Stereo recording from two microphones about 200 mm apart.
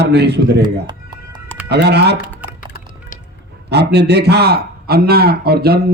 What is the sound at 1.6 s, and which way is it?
Speech, 55° right (ahead or behind).